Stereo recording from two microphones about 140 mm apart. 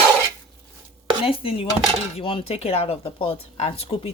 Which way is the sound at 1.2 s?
40° left (ahead or behind).